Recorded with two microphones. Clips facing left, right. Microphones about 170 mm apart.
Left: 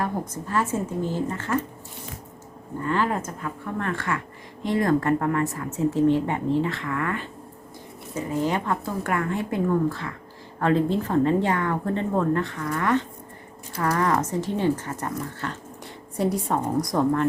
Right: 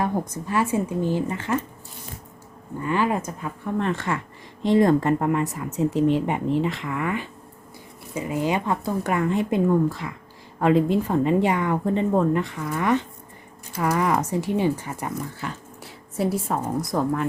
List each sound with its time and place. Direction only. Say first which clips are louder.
0.0 s speech: right 3 dB; 15° right (ahead or behind)
2.8 s speech: right 2 dB; 15° right (ahead or behind)